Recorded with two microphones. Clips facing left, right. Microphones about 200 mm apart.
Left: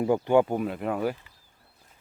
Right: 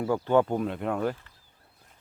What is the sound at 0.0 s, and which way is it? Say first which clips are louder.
Speech: left 2 dB; 15° left (ahead or behind).